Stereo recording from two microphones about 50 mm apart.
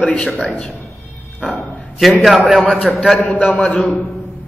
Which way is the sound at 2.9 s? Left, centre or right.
Centre.